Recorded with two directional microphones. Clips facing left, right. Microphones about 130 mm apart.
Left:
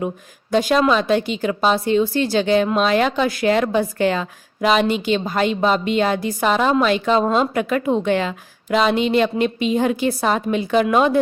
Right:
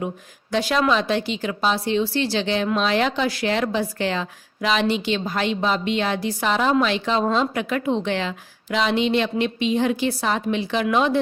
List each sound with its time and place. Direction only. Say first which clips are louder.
0.5 s a woman's voice: left 4 dB; 45° left (ahead or behind)